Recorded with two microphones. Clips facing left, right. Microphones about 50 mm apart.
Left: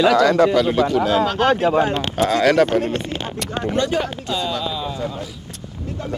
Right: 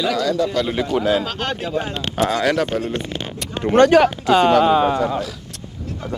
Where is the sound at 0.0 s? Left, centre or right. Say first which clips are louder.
Left 6 dB; left.